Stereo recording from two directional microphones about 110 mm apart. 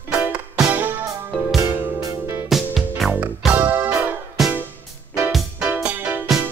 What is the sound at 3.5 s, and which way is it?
Music, 15° right (ahead or behind).